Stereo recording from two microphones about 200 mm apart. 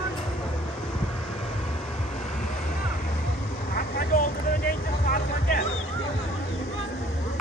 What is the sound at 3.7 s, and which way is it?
Vehicle, 45° left (ahead or behind).